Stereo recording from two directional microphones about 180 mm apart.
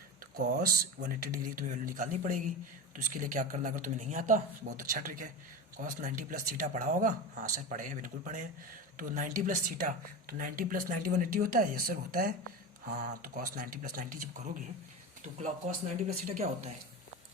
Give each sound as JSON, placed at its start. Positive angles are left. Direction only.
{"t": 0.3, "sound": "speech", "side_deg": -55}